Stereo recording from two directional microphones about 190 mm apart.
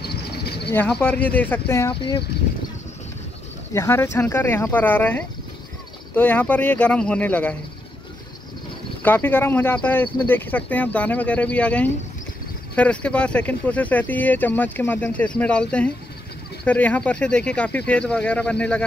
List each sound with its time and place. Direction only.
0.0 s a sound: 55° left (ahead or behind)
0.7 s speech: 5° left (ahead or behind)
1.9 s speech: 25° left (ahead or behind)
3.7 s speech: 15° left (ahead or behind)
9.0 s speech: 10° left (ahead or behind)